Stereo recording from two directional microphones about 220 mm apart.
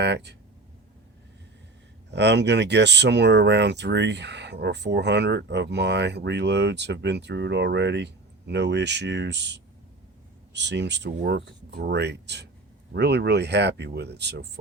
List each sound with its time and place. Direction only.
0.0 s speech: 50° right (ahead or behind)
2.0 s speech: 50° right (ahead or behind)